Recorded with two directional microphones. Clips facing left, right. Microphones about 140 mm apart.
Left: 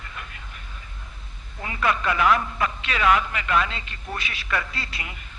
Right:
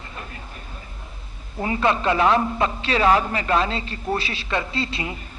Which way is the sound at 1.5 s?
30° right (ahead or behind).